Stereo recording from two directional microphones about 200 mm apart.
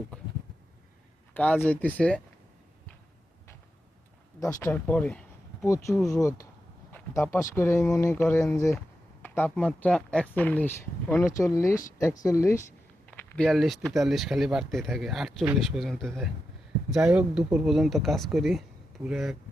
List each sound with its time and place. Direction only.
1.3 s speech: 5° left (ahead or behind)
4.4 s speech: 15° left (ahead or behind); by 19.4 s 5° right (ahead or behind)